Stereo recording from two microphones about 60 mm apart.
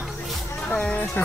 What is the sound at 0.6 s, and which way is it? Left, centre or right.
Speech, centre.